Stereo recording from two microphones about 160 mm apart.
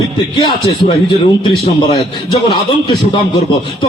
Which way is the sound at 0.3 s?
30° left (ahead or behind).